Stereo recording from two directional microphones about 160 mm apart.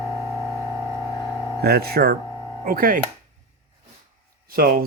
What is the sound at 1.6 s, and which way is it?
Speech, 75° right (ahead or behind).